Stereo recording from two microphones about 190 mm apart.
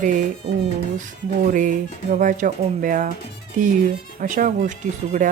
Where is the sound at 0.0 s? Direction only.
40° right (ahead or behind).